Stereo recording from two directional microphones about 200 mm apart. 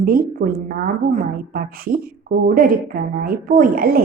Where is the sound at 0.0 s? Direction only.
45° right (ahead or behind).